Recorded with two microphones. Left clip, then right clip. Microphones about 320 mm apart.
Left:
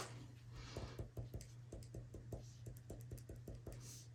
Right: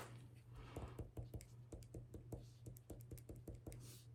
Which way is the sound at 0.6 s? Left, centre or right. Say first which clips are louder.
Left 2 dB; centre.